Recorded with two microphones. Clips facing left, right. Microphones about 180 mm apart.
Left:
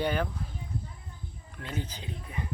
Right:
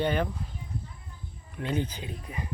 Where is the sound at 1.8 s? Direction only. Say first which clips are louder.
Right 3 dB; 10° right (ahead or behind).